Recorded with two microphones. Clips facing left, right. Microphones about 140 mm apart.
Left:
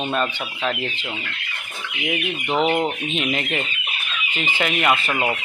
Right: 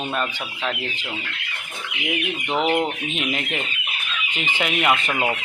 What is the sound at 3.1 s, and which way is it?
Speech, 5° right (ahead or behind).